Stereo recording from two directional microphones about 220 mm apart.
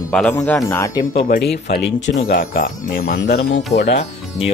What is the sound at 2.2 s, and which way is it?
Speech, 40° left (ahead or behind).